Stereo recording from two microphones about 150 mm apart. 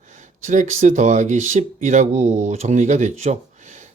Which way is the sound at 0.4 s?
55° right (ahead or behind).